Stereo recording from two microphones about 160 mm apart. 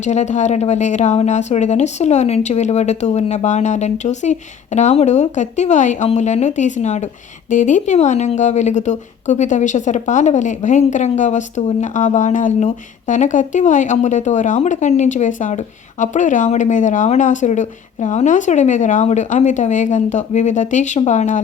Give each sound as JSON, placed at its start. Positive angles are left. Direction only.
{"t": 0.0, "sound": "a woman's voice", "side_deg": 45}